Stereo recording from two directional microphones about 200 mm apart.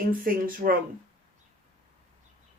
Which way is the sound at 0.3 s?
45° right (ahead or behind).